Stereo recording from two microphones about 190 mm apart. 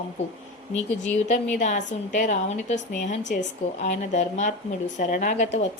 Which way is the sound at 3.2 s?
65° left (ahead or behind).